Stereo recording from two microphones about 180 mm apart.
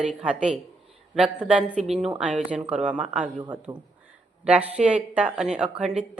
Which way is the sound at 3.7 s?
25° right (ahead or behind).